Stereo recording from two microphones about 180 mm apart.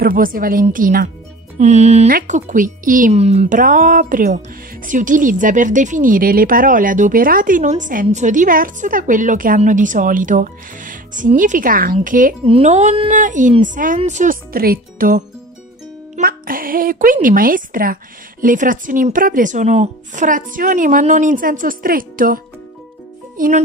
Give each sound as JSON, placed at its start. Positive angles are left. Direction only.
{"t": 0.0, "sound": "speech", "side_deg": -50}
{"t": 12.4, "sound": "speech", "side_deg": -35}
{"t": 13.1, "sound": "speech", "side_deg": -45}